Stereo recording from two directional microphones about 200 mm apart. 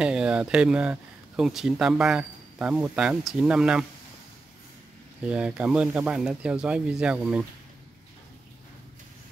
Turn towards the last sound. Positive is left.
turn(degrees=-5)  # may be behind; listen again after turning